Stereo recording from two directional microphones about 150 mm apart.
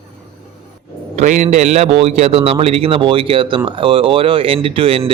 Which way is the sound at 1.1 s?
50° right (ahead or behind).